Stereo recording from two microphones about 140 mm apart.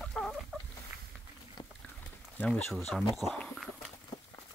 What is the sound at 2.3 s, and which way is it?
Speech, 5° left (ahead or behind).